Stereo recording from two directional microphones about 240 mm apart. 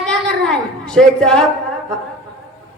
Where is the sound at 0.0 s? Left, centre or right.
Centre.